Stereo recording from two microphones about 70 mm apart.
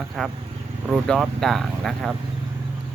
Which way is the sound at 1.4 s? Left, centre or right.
Centre.